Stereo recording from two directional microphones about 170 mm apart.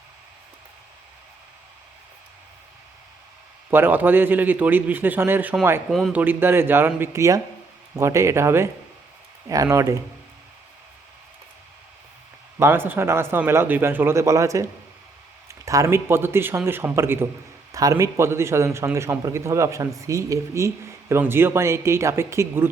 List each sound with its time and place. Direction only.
3.7 s speech: 10° right (ahead or behind)
12.5 s speech: 15° right (ahead or behind)